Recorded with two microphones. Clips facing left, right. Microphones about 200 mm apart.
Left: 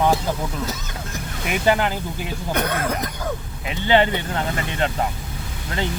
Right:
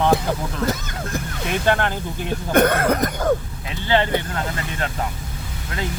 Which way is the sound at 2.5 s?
50° right (ahead or behind).